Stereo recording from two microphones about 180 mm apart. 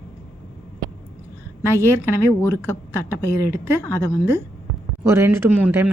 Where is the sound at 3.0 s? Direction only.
15° right (ahead or behind).